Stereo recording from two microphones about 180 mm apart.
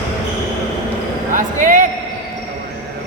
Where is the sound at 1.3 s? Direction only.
45° right (ahead or behind).